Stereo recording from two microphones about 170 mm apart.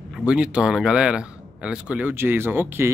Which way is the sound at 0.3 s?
5° right (ahead or behind).